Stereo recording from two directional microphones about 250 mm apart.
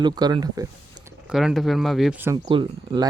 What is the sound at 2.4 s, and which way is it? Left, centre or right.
Speech, centre.